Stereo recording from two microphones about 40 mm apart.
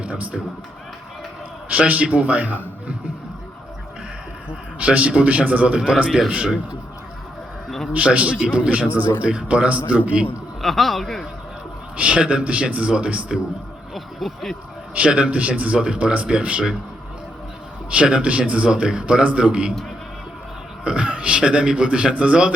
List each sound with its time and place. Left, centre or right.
0.0 s speech: right
1.7 s speech: right
4.4 s speech: right
5.6 s speech: right
7.9 s speech: right
10.6 s speech: centre
11.9 s speech: right
13.9 s speech: centre
14.9 s speech: right
15.8 s speech: right
17.9 s speech: right
18.7 s speech: right
20.8 s speech: right